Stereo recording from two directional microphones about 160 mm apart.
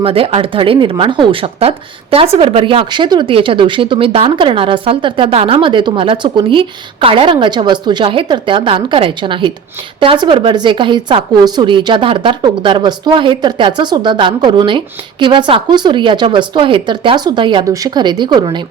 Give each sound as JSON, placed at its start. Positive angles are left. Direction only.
{"t": 0.0, "sound": "a woman's voice", "side_deg": -35}